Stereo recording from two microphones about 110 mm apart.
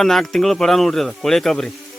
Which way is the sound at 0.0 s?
5° left (ahead or behind).